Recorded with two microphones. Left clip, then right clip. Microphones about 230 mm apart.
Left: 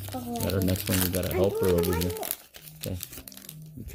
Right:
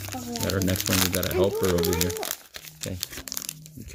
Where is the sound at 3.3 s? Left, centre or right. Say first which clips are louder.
Right 12 dB; right.